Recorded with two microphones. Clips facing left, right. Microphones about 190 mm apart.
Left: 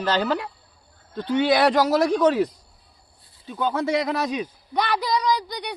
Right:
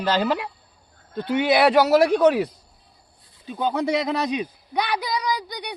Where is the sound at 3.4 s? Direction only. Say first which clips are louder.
Right 1 dB; 15° right (ahead or behind).